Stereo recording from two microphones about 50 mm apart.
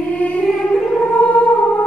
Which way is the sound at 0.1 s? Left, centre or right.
Left.